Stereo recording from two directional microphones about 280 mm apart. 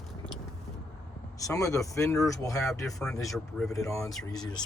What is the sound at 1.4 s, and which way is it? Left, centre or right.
Speech, centre.